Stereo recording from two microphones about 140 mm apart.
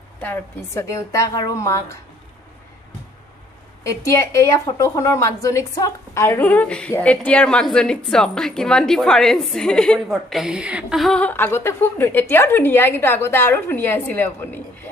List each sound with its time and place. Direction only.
0.2 s a woman's voice: 15° left (ahead or behind)
3.8 s a woman's voice: 20° left (ahead or behind)